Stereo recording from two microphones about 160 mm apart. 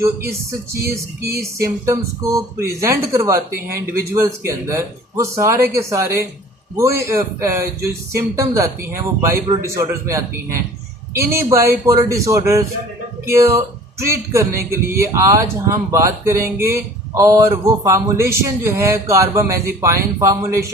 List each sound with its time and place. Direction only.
0.8 s speech: 20° right (ahead or behind)
3.5 s speech: 70° right (ahead or behind)
4.1 s speech: 15° right (ahead or behind)